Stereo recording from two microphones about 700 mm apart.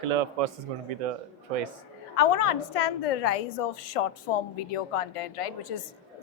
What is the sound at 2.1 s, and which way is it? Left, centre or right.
A woman's voice, left.